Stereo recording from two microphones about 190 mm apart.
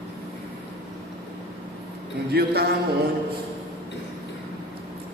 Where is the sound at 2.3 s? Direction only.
55° right (ahead or behind).